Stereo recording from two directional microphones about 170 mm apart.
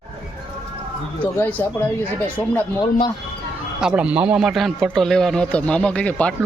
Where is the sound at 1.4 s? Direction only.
10° left (ahead or behind).